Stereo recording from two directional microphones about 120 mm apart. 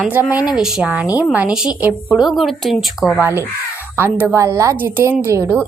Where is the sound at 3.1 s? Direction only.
20° right (ahead or behind).